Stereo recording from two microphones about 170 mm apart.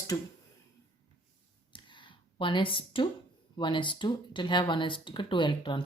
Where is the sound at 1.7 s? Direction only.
30° left (ahead or behind).